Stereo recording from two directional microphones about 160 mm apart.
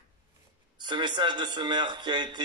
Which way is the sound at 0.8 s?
30° right (ahead or behind).